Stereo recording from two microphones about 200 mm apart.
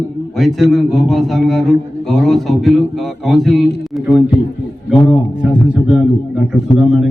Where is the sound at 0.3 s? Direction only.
Centre (ahead or behind).